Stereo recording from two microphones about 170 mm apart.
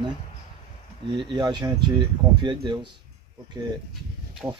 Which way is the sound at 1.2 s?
25° right (ahead or behind).